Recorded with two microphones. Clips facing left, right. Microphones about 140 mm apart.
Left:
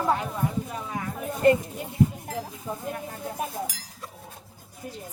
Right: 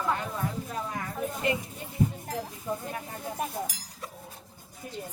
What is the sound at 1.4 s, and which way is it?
Speech, 45° left (ahead or behind).